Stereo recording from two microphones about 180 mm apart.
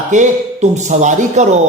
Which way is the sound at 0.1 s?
40° right (ahead or behind).